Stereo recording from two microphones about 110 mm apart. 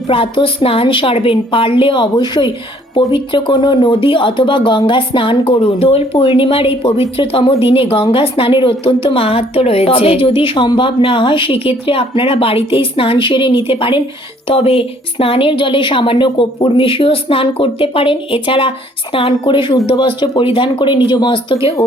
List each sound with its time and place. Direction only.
0.1 s a woman's voice: 55° left (ahead or behind)